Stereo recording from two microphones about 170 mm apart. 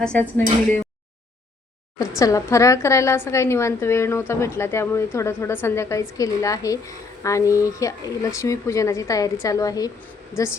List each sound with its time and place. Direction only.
0.0 s a woman's voice: 10° left (ahead or behind)
2.0 s a woman's voice: 20° left (ahead or behind)